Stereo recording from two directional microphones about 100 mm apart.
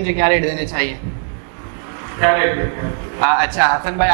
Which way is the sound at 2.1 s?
20° right (ahead or behind).